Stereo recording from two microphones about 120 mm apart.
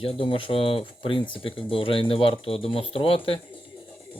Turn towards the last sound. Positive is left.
turn(degrees=50)  # may be behind; listen again after turning